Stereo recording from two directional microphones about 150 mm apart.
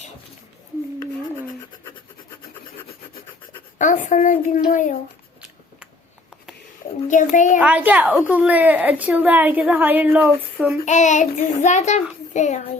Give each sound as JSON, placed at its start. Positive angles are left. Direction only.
{"t": 3.8, "sound": "speech", "side_deg": 55}
{"t": 6.8, "sound": "a sound", "side_deg": 40}
{"t": 7.3, "sound": "speech", "side_deg": 60}
{"t": 7.6, "sound": "a woman's voice", "side_deg": -10}
{"t": 10.8, "sound": "child singing", "side_deg": 50}